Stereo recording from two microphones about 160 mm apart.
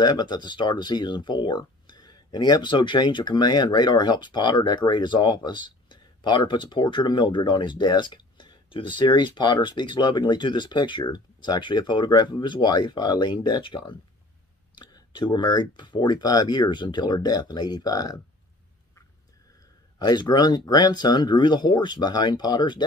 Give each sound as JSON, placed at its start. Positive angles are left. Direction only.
{"t": 0.0, "sound": "speech", "side_deg": 25}
{"t": 20.0, "sound": "speech", "side_deg": 25}